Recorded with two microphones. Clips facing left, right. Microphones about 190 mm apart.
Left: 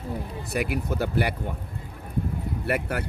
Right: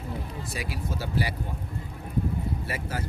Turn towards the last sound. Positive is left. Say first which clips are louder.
# left 6 dB
turn(degrees=65)  # may be behind; listen again after turning